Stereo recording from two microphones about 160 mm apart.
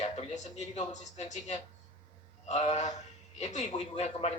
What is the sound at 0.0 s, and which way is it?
Speech, 45° left (ahead or behind).